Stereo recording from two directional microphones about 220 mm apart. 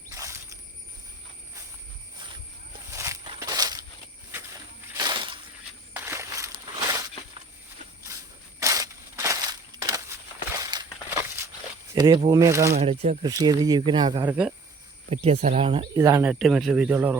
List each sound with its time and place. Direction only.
0.2 s a sound: 10° right (ahead or behind)
2.9 s walk: 15° right (ahead or behind)
4.9 s a sound: 20° right (ahead or behind)
5.9 s walk: 10° right (ahead or behind)
8.5 s crushing: 15° right (ahead or behind)
11.9 s speech: 20° right (ahead or behind)
12.7 s speech: 25° right (ahead or behind)
13.3 s speech: 15° right (ahead or behind)
14.3 s speech: 5° right (ahead or behind)
15.1 s speech: 30° right (ahead or behind)
16.3 s speech: centre (ahead or behind)